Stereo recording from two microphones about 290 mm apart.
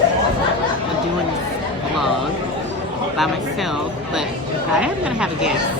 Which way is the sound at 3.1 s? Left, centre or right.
Centre.